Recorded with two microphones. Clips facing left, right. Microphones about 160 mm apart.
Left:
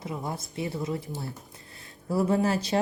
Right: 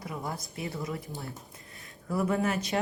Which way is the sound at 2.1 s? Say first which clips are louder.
Left 4 dB; 30° left (ahead or behind).